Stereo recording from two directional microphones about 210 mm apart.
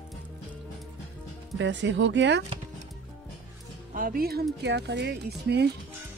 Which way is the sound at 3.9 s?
45° right (ahead or behind).